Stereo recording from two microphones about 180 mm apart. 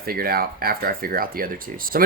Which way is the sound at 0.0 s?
55° right (ahead or behind).